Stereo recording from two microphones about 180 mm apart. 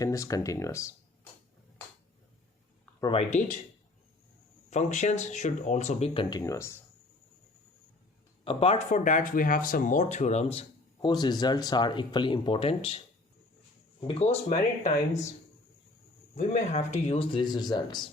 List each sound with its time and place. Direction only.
0.0 s speech: 20° left (ahead or behind)
3.0 s speech: 30° left (ahead or behind)
4.7 s speech: 40° left (ahead or behind)
6.3 s speech: 15° left (ahead or behind)
8.4 s speech: 35° left (ahead or behind)
14.1 s speech: 35° left (ahead or behind)
16.4 s speech: 40° left (ahead or behind); by 18.1 s 25° left (ahead or behind)